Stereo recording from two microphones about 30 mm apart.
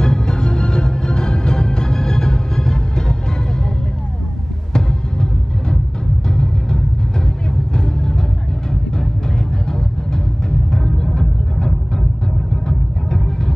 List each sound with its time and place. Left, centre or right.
0.0 s music: left
4.7 s music: left
9.7 s music: left